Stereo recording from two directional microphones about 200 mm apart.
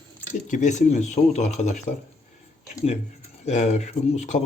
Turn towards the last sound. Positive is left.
turn(degrees=35)  # may be behind; listen again after turning